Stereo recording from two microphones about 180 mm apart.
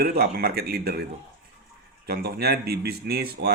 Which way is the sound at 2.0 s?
60° right (ahead or behind).